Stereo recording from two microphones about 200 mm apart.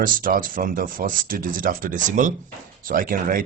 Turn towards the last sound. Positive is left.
turn(degrees=-45)  # may be behind; listen again after turning